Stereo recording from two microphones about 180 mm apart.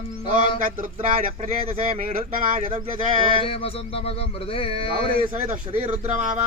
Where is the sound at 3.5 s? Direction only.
30° left (ahead or behind).